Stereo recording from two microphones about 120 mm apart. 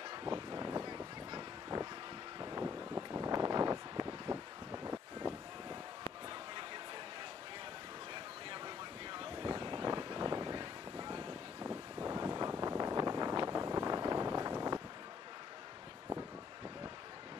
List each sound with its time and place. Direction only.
0.1 s vehicle: 40° right (ahead or behind)
2.4 s wind: 30° right (ahead or behind)
8.1 s vehicle: 40° right (ahead or behind)
11.6 s a sound: 20° right (ahead or behind)